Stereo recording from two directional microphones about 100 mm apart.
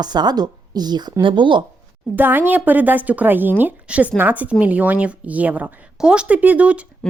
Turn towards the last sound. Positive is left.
turn(degrees=-15)  # may be behind; listen again after turning